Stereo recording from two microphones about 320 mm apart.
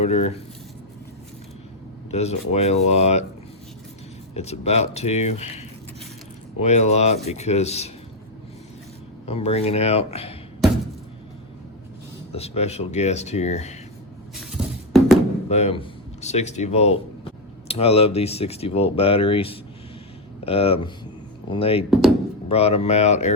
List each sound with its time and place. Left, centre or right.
0.0 s speech: centre
2.0 s speech: centre
4.4 s speech: centre
9.2 s speech: centre
12.3 s speech: centre
14.5 s music: centre
15.4 s speech: centre